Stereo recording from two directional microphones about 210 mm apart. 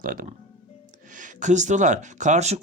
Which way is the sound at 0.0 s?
40° right (ahead or behind).